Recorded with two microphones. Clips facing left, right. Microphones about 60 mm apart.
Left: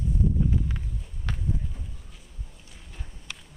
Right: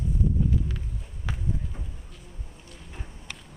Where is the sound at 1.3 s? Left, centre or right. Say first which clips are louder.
Even; centre.